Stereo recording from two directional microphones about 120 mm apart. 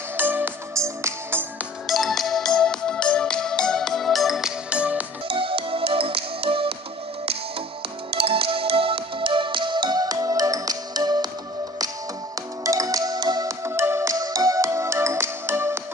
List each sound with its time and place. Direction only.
0.2 s music: 15° right (ahead or behind)
1.9 s music: centre (ahead or behind)
5.3 s music: 50° right (ahead or behind)
8.1 s music: 50° right (ahead or behind); by 11.2 s 35° right (ahead or behind)
12.6 s music: 30° right (ahead or behind)
13.7 s music: 20° right (ahead or behind)